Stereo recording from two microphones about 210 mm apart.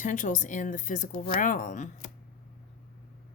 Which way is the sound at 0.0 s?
40° left (ahead or behind).